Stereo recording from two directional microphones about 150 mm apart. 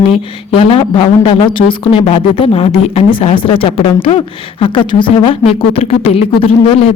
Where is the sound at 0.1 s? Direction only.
40° left (ahead or behind).